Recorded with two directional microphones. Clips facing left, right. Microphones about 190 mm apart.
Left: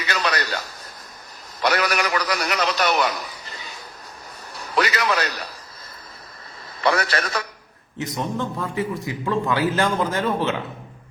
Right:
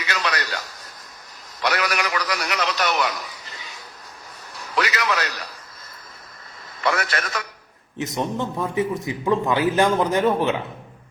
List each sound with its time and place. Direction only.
0.1 s a sound: 35° left (ahead or behind)
1.6 s a man's voice: 35° left (ahead or behind)
4.7 s a man's voice: 35° left (ahead or behind)
6.8 s a man's voice: 35° left (ahead or behind)
7.9 s a man's voice: 20° right (ahead or behind)